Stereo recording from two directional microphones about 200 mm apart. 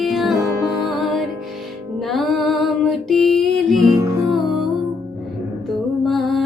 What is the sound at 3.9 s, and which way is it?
Music, 15° right (ahead or behind).